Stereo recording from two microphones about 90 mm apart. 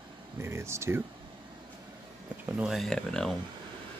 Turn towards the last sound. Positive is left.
turn(degrees=5)  # may be behind; listen again after turning